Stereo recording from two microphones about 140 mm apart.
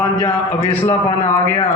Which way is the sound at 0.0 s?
30° left (ahead or behind).